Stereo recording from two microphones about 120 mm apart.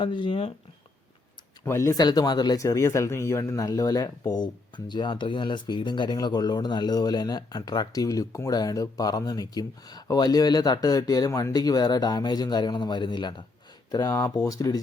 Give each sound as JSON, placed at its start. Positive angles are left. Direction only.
{"t": 0.0, "sound": "speech", "side_deg": 40}
{"t": 1.6, "sound": "speech", "side_deg": 20}
{"t": 13.9, "sound": "speech", "side_deg": 30}